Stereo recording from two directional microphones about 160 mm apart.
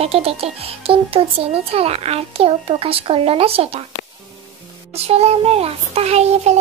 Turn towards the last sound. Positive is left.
turn(degrees=-40)  # may be behind; listen again after turning